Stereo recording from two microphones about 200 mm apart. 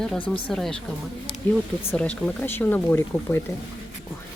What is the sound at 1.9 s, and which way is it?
Speech, 5° left (ahead or behind).